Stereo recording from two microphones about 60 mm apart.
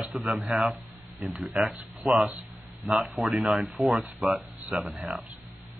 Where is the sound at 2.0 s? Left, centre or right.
Centre.